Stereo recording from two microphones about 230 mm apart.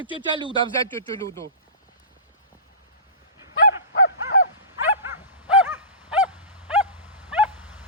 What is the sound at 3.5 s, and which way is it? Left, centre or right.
Dog, left.